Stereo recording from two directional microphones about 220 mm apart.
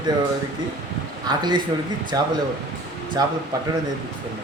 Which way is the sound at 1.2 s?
20° right (ahead or behind).